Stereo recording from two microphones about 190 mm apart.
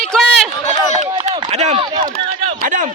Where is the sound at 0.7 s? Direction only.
35° right (ahead or behind).